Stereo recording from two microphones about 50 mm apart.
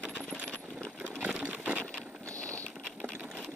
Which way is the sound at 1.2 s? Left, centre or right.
Right.